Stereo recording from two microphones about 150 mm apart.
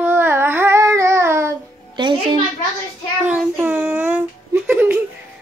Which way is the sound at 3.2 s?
10° right (ahead or behind).